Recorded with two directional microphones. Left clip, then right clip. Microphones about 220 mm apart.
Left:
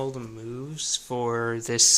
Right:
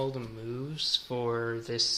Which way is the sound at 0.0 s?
25° left (ahead or behind).